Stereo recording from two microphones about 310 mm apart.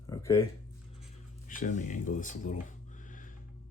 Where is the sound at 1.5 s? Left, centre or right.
Left.